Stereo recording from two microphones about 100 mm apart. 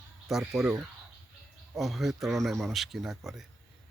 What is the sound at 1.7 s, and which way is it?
Speech, centre (ahead or behind).